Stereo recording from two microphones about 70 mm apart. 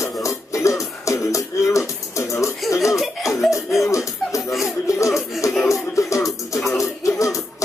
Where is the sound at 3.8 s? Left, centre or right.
Left.